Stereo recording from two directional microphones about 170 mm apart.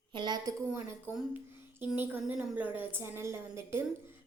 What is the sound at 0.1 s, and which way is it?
Speech, 25° right (ahead or behind).